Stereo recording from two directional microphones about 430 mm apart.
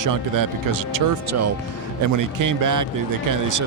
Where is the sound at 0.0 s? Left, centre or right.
Right.